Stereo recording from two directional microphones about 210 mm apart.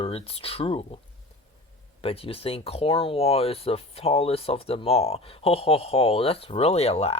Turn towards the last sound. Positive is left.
turn(degrees=30)  # may be behind; listen again after turning